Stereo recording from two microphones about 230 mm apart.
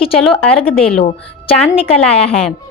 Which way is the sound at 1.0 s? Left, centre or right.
Left.